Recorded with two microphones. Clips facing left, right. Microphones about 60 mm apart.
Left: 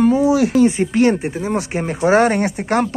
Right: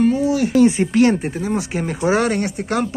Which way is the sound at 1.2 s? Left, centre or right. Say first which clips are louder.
Left 1 dB; centre.